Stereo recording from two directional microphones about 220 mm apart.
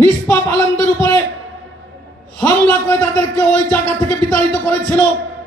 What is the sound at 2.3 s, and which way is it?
A man's voice, 10° left (ahead or behind).